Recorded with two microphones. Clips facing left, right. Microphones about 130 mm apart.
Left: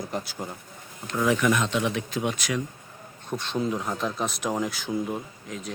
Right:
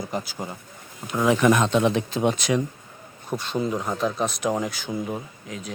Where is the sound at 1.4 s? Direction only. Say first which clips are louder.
Right 5 dB; 40° right (ahead or behind).